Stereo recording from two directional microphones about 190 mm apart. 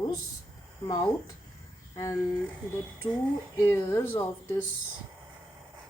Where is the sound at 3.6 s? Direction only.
15° left (ahead or behind).